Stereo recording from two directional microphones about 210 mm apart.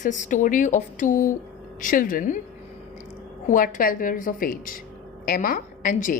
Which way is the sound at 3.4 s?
40° left (ahead or behind).